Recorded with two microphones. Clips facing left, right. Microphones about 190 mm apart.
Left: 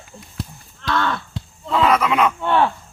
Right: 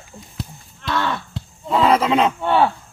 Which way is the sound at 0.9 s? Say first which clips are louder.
Left 1 dB; 5° right (ahead or behind).